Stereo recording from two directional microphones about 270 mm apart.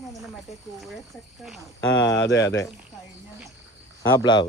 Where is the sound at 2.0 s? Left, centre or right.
Left.